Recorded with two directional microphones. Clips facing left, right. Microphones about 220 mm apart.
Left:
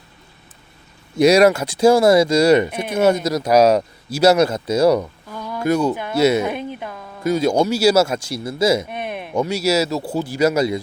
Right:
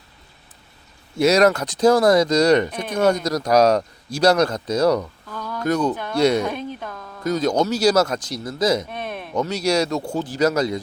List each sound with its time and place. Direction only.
1.1 s speech: 15° left (ahead or behind)